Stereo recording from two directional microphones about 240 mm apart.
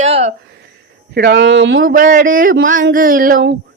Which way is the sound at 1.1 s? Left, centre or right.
Right.